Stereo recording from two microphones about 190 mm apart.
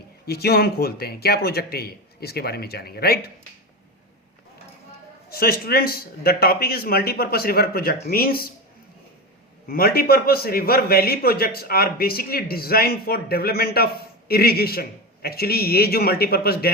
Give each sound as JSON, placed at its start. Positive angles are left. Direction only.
{"t": 0.3, "sound": "a man's voice", "side_deg": 55}
{"t": 5.3, "sound": "a man's voice", "side_deg": 50}
{"t": 9.6, "sound": "a man's voice", "side_deg": 50}